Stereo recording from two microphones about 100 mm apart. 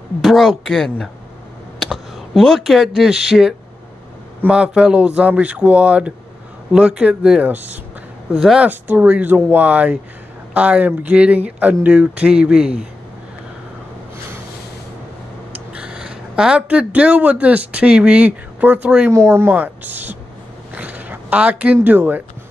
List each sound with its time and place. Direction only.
0.2 s speech: centre (ahead or behind)
1.8 s a sound: centre (ahead or behind)
3.0 s speech: 5° right (ahead or behind)
8.3 s speech: 5° right (ahead or behind)
15.7 s speech: 10° right (ahead or behind)
20.7 s a sound: 15° right (ahead or behind)
21.7 s speech: 20° right (ahead or behind)